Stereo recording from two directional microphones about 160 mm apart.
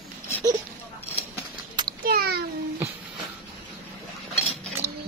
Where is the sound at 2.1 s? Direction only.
75° right (ahead or behind).